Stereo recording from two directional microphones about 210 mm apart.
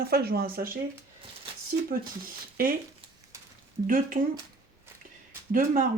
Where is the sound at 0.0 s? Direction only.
50° right (ahead or behind).